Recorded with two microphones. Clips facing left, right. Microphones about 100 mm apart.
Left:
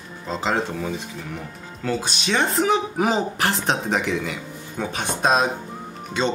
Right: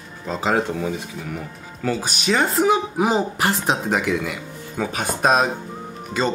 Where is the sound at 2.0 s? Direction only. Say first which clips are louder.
Right 3 dB; 5° right (ahead or behind).